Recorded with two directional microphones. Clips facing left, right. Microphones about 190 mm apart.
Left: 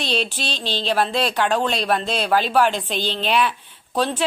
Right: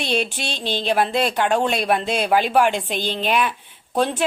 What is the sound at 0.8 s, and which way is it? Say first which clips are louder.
A woman's voice: right 1 dB; 10° right (ahead or behind).